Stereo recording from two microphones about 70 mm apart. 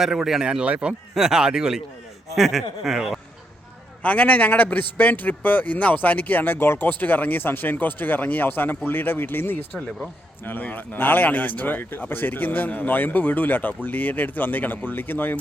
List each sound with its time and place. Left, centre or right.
0.0 s speech: centre
4.0 s a man's voice: left